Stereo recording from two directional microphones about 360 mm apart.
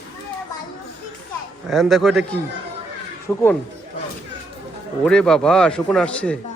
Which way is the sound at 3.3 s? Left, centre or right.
Centre.